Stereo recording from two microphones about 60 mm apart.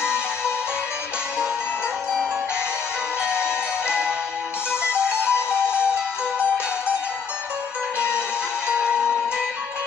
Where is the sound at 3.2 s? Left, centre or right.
Centre.